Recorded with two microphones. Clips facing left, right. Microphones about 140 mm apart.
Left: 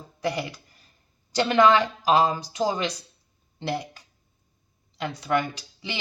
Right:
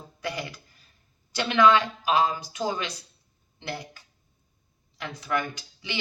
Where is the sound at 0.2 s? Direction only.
30° left (ahead or behind).